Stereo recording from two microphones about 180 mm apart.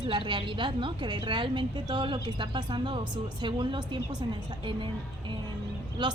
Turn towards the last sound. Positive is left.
turn(degrees=-25)  # may be behind; listen again after turning